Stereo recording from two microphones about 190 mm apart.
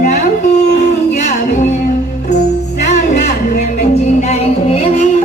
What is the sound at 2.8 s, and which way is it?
Music, 40° left (ahead or behind).